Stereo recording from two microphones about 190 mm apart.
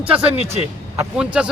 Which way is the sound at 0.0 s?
5° right (ahead or behind).